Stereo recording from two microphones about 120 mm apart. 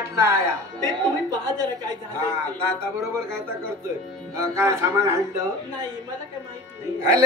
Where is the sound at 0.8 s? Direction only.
35° right (ahead or behind).